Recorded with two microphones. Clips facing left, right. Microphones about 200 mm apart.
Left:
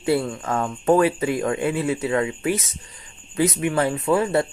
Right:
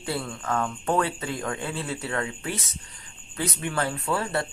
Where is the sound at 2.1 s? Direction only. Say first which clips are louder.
Left 8 dB; 20° left (ahead or behind).